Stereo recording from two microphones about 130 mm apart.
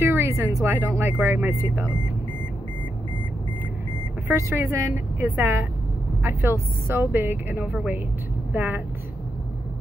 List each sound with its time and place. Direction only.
0.1 s speech: 20° right (ahead or behind)
4.3 s a woman's voice: 20° right (ahead or behind)